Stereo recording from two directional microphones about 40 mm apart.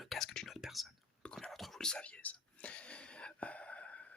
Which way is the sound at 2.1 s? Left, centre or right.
Left.